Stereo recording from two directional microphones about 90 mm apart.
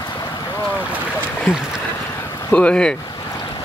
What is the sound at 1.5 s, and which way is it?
Speech, 10° right (ahead or behind).